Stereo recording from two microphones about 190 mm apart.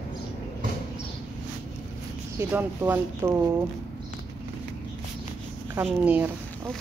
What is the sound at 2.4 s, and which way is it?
Speech, 10° right (ahead or behind).